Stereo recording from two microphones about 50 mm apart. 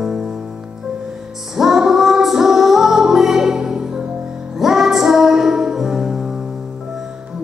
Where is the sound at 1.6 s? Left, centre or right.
Centre.